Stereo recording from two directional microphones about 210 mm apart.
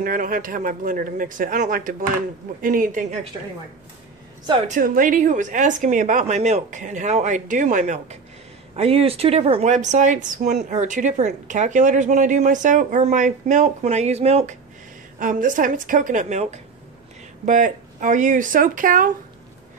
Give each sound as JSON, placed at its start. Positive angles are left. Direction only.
{"t": 0.0, "sound": "a woman's voice", "side_deg": -40}
{"t": 4.6, "sound": "a woman's voice", "side_deg": -40}